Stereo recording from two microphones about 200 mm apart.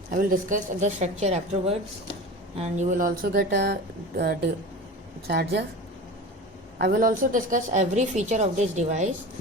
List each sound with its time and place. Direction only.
0.1 s a woman's voice: 40° right (ahead or behind)
6.7 s a woman's voice: 50° right (ahead or behind); by 9.0 s 35° right (ahead or behind)